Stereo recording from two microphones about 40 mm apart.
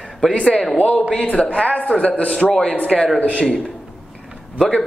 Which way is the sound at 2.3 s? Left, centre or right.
Centre.